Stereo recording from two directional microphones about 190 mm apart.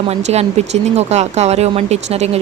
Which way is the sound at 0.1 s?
35° right (ahead or behind).